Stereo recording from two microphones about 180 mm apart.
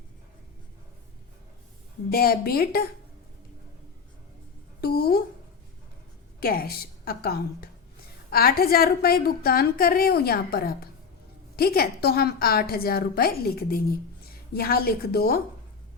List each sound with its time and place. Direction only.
2.0 s a woman's voice: 55° left (ahead or behind)
4.8 s a woman's voice: 60° left (ahead or behind)
6.4 s a woman's voice: 55° left (ahead or behind)